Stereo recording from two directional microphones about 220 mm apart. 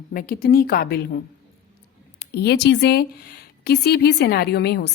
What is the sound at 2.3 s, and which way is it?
A woman's voice, 50° left (ahead or behind).